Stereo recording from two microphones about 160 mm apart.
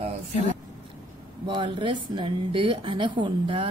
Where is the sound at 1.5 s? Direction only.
30° right (ahead or behind).